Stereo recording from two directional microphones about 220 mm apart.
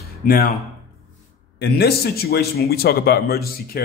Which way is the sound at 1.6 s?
45° left (ahead or behind).